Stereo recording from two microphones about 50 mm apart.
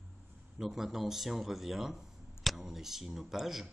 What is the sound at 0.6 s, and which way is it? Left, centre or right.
A man's voice, centre.